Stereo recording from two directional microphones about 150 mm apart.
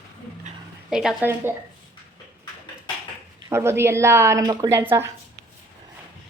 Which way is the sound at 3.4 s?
15° right (ahead or behind).